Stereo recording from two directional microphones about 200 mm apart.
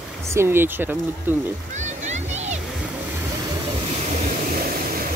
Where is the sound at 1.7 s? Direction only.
35° right (ahead or behind).